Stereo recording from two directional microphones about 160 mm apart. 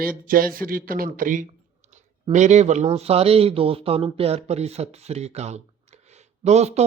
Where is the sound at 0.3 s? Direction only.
65° right (ahead or behind).